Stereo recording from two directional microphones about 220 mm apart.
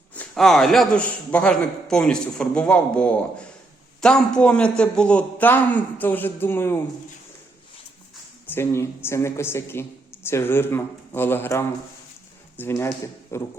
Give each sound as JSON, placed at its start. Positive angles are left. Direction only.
{"t": 0.1, "sound": "a man's voice", "side_deg": 5}
{"t": 8.4, "sound": "a woman's voice", "side_deg": 10}